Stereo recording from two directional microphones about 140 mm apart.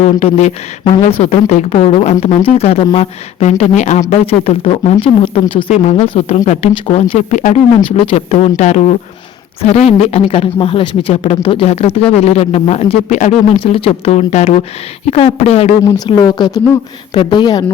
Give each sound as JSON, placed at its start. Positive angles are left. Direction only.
{"t": 0.0, "sound": "speech", "side_deg": 50}
{"t": 16.0, "sound": "speech", "side_deg": 30}